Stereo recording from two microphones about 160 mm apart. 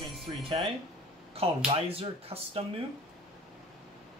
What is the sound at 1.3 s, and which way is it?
Speech, 40° right (ahead or behind).